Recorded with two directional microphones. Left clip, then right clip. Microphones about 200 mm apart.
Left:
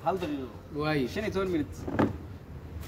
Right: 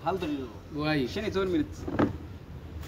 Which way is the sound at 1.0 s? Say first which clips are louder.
Right 1 dB; 30° left (ahead or behind).